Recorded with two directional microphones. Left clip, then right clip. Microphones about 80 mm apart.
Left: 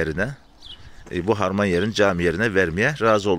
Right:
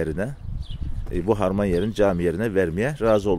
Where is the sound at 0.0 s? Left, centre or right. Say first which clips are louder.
Left 3 dB; right.